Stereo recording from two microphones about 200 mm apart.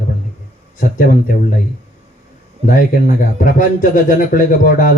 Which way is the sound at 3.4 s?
45° left (ahead or behind).